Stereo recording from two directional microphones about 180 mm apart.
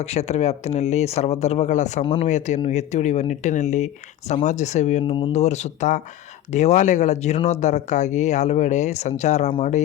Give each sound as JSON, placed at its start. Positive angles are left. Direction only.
{"t": 0.0, "sound": "speech", "side_deg": 35}
{"t": 5.0, "sound": "speech", "side_deg": 25}
{"t": 5.3, "sound": "speech", "side_deg": 40}